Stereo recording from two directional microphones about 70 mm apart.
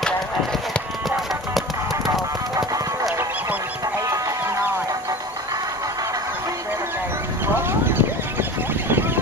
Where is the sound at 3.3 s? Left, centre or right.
Right.